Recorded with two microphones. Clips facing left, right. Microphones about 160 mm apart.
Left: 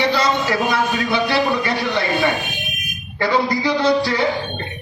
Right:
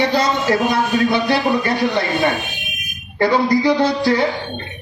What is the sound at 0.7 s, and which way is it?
A man's voice, 50° right (ahead or behind).